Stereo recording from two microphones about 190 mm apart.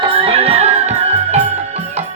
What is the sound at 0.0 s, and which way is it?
Music, 30° right (ahead or behind).